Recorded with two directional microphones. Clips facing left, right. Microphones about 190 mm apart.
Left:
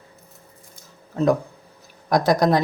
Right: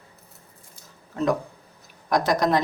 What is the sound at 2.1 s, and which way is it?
Speech, 35° left (ahead or behind).